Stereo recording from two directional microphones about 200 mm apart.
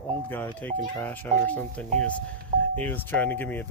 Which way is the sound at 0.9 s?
10° left (ahead or behind).